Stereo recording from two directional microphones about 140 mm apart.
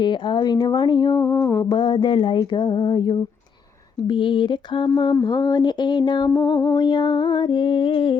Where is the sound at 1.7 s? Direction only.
30° left (ahead or behind).